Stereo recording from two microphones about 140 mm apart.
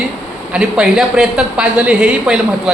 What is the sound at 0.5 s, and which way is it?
Speech, 5° right (ahead or behind).